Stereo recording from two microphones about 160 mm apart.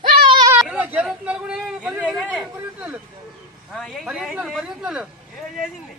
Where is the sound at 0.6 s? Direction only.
10° right (ahead or behind).